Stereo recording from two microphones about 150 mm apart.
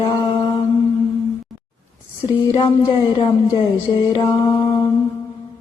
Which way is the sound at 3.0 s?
35° left (ahead or behind).